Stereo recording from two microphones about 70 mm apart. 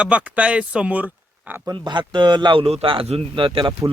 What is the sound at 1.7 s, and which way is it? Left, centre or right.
Speech, right.